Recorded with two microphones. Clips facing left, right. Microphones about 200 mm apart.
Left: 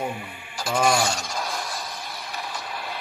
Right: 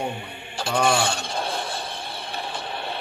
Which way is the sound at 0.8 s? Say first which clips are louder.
Left 1 dB; 30° right (ahead or behind).